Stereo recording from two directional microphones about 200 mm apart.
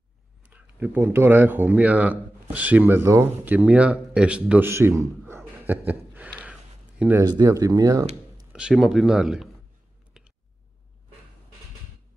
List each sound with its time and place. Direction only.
0.5 s speech: 10° right (ahead or behind)
5.7 s a sound: 10° right (ahead or behind)
7.0 s speech: 10° right (ahead or behind)
8.5 s speech: 5° right (ahead or behind)